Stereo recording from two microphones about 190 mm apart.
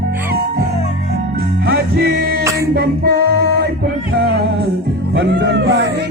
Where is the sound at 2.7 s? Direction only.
55° right (ahead or behind).